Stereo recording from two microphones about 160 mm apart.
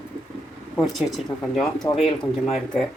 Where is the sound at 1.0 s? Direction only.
Centre (ahead or behind).